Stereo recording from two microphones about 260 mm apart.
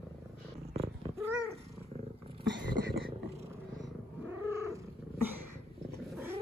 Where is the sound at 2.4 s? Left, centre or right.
Right.